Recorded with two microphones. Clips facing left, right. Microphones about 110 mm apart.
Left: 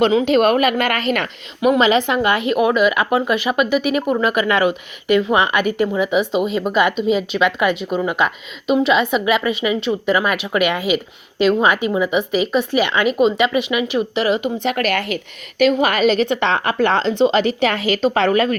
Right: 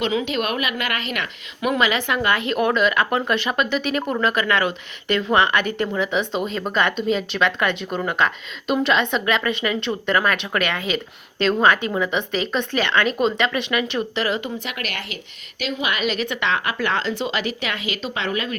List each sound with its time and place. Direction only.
0.0 s a woman's voice: 40° left (ahead or behind)
1.6 s speech: 25° left (ahead or behind)
14.6 s a woman's voice: 40° left (ahead or behind)